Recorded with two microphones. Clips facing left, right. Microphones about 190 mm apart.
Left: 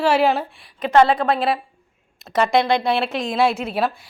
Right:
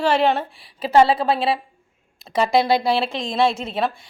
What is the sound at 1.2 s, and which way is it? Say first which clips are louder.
Speech: even; 30° right (ahead or behind).